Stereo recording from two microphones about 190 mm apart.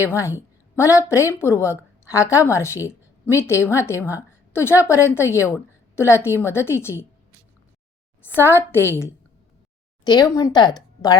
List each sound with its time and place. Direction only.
0.0 s a woman's voice: 15° left (ahead or behind)
8.2 s a woman's voice: 10° left (ahead or behind)